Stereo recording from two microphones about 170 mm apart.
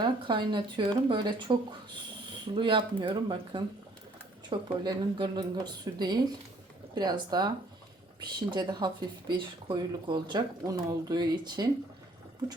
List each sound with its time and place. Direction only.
0.0 s speech: 25° right (ahead or behind)
2.6 s speech: 30° right (ahead or behind)